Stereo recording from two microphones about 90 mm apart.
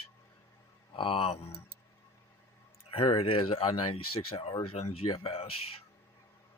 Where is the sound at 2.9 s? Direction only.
70° left (ahead or behind).